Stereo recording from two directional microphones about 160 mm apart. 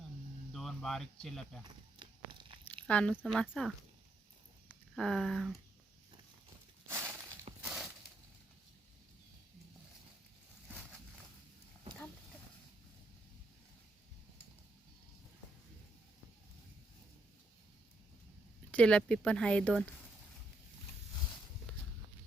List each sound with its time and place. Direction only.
0.5 s speech: centre (ahead or behind)
1.6 s a sound: 30° right (ahead or behind)
2.8 s speech: 5° left (ahead or behind)
4.9 s speech: 5° left (ahead or behind)
6.8 s breaking: 15° right (ahead or behind)
7.6 s a sound: 5° right (ahead or behind)
18.7 s speech: 5° left (ahead or behind)